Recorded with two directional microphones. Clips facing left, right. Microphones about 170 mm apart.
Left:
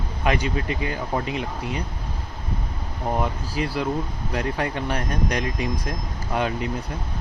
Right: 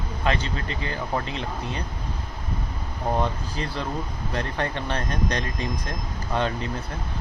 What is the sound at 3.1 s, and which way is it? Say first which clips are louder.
Speech: left 1 dB; 5° left (ahead or behind).